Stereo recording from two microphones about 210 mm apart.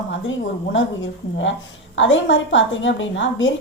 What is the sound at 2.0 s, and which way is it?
A woman's voice, 60° left (ahead or behind).